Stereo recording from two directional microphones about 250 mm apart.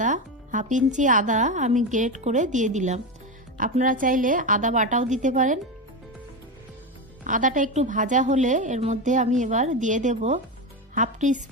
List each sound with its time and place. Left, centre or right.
0.0 s a woman's voice: right
7.3 s a woman's voice: right